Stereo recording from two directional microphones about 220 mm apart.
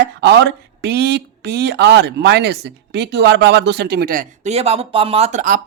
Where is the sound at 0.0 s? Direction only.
50° right (ahead or behind); by 5.5 s 35° right (ahead or behind).